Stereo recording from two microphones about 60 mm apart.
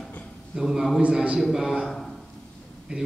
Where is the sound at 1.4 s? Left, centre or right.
Centre.